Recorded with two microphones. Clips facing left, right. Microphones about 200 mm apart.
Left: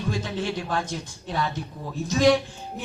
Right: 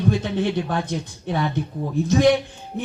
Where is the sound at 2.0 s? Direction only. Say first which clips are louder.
Right 3 dB; 20° right (ahead or behind).